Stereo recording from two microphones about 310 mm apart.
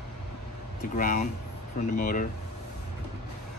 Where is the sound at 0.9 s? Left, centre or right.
Left.